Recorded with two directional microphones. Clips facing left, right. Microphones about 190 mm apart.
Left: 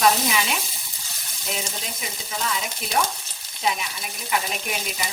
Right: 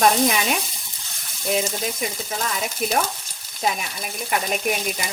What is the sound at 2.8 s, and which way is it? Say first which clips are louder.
Speech: right 8 dB; 50° right (ahead or behind).